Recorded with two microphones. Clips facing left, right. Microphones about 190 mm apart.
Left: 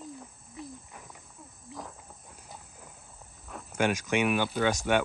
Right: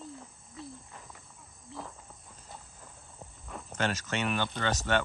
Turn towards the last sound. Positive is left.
turn(degrees=10)  # may be behind; listen again after turning